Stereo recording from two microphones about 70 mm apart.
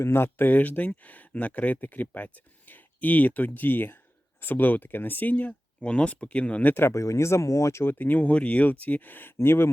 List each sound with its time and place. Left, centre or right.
0.0 s speech: left
7.0 s speech: left
7.9 s speech: left